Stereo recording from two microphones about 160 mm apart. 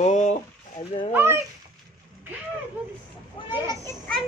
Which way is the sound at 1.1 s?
15° right (ahead or behind).